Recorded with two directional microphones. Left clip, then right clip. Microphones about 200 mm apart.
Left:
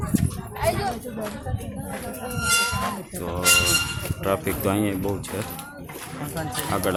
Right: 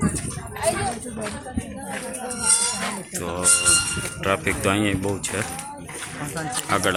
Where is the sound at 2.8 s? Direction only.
Centre (ahead or behind).